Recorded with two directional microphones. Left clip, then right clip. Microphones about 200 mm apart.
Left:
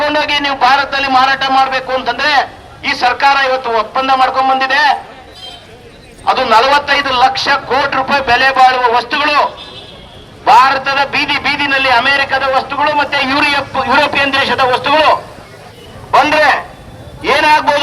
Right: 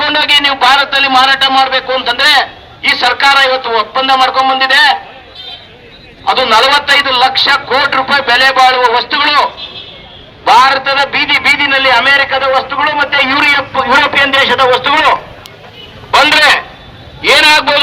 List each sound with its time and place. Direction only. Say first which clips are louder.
0.0 s a man's voice: right 4 dB; 20° left (ahead or behind)
6.2 s a man's voice: right 1 dB; 20° left (ahead or behind)
17.2 s a man's voice: right 3 dB; 50° left (ahead or behind)